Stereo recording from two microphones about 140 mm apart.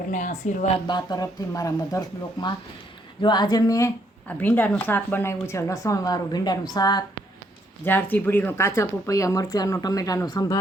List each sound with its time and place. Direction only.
0.1 s speech: 65° left (ahead or behind)
0.9 s speech: 30° left (ahead or behind)
7.9 s speech: 15° left (ahead or behind)